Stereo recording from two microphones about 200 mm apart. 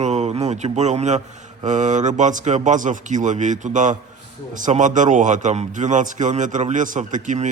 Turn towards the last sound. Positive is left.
turn(degrees=-40)  # may be behind; listen again after turning